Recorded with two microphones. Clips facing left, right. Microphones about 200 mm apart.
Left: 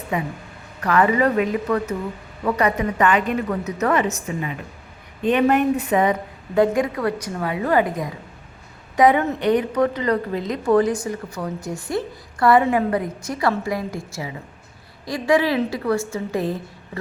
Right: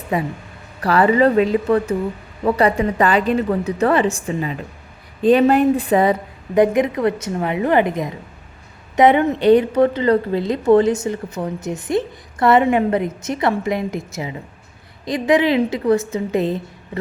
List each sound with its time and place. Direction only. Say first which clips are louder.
0.1 s a woman's voice: right 4 dB; 35° right (ahead or behind)
6.5 s a woman's voice: right 3 dB; 20° right (ahead or behind)